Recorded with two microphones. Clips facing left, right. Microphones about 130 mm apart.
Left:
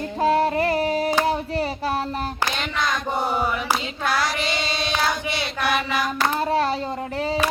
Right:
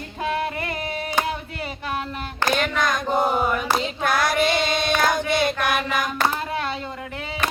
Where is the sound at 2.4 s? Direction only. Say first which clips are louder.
Right 7 dB; 50° right (ahead or behind).